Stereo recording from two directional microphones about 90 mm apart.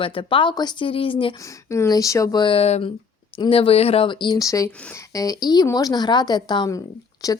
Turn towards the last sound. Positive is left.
turn(degrees=40)  # may be behind; listen again after turning